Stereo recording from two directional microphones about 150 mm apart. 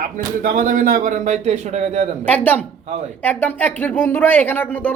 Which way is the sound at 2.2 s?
10° left (ahead or behind).